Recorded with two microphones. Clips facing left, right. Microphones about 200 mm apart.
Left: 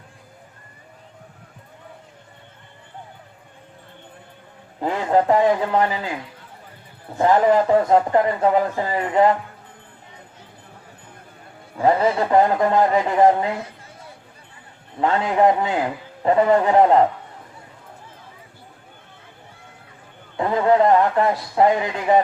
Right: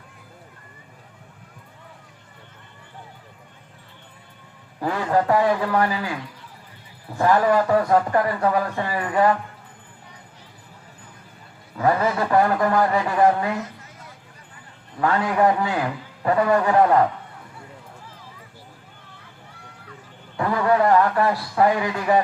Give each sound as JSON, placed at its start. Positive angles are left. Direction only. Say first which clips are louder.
{"t": 4.8, "sound": "a man's voice", "louder": "left 2 dB", "side_deg": 20}
{"t": 11.8, "sound": "a man's voice", "louder": "left 3 dB", "side_deg": 25}
{"t": 14.9, "sound": "a man's voice", "louder": "left 2 dB", "side_deg": 25}
{"t": 20.3, "sound": "a man's voice", "louder": "left 3 dB", "side_deg": 20}